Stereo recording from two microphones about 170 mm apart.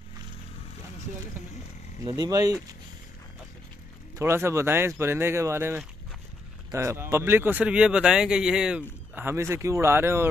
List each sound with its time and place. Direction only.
2.0 s speech: 20° right (ahead or behind)
4.2 s speech: 15° right (ahead or behind)